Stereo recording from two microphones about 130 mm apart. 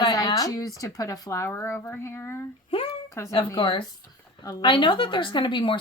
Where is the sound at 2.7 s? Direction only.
40° left (ahead or behind).